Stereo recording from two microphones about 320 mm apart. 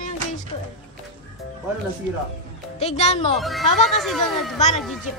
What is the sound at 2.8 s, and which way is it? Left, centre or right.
Speech, centre.